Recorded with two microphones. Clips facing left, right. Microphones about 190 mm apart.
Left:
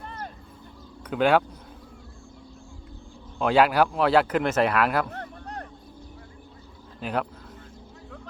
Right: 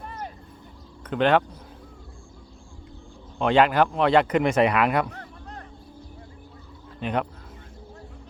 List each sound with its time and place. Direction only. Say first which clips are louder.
1.0 s speech: even; 10° left (ahead or behind)
3.3 s speech: right 1 dB; 5° left (ahead or behind)
5.0 s a sound: left 3 dB; 45° left (ahead or behind)
7.0 s speech: right 2 dB; centre (ahead or behind)